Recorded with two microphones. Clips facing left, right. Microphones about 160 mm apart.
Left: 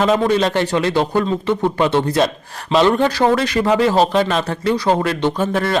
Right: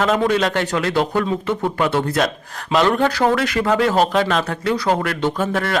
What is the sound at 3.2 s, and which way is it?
Speech, 10° left (ahead or behind).